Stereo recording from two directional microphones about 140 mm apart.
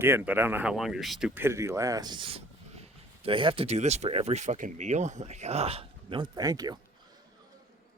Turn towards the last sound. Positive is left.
turn(degrees=-25)  # may be behind; listen again after turning